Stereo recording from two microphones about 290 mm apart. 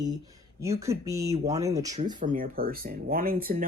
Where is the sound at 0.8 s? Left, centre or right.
Centre.